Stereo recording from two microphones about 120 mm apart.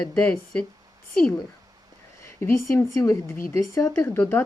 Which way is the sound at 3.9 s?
15° left (ahead or behind).